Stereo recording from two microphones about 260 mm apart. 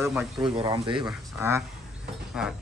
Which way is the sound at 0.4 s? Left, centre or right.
Centre.